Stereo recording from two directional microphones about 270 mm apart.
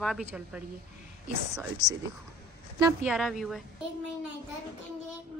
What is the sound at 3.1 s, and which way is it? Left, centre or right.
Speech, centre.